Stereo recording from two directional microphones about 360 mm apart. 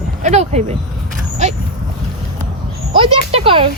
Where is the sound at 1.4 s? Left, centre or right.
Centre.